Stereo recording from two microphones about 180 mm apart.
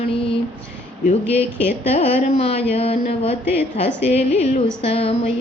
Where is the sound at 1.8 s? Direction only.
35° left (ahead or behind).